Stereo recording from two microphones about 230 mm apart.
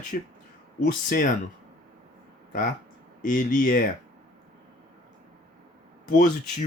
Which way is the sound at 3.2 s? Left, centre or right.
Left.